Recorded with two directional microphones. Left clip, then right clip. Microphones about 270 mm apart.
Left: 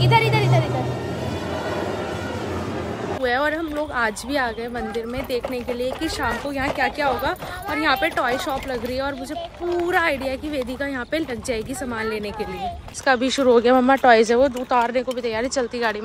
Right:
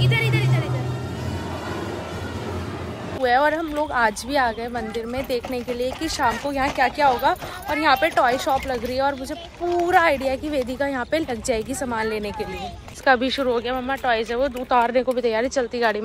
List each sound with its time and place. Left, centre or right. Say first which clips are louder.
0.1 s music: left 9 dB; centre
3.2 s speech: right 3 dB; centre
14.7 s speech: right 1 dB; centre